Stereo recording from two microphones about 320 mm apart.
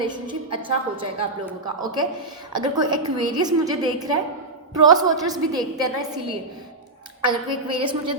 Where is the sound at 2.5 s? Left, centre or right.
Centre.